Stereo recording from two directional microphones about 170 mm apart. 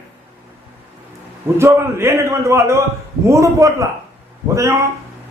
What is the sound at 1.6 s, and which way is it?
A man's voice, 15° right (ahead or behind).